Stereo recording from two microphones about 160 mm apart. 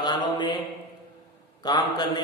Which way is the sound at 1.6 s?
25° left (ahead or behind).